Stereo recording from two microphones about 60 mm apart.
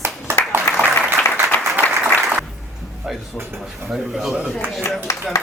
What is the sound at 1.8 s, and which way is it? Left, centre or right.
Applause, left.